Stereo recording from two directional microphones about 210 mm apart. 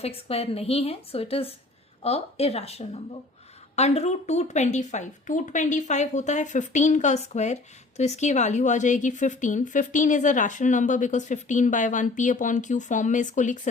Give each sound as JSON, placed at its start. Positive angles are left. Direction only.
{"t": 0.0, "sound": "a woman's voice", "side_deg": 30}